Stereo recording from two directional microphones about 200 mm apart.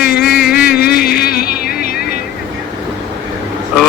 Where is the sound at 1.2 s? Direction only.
50° left (ahead or behind).